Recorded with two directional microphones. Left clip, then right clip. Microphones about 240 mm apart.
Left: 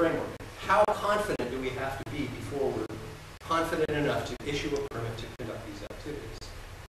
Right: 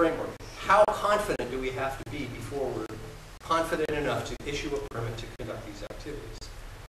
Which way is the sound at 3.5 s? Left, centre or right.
Centre.